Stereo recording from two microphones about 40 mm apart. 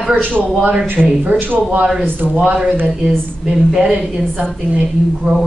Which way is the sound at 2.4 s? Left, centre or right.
Right.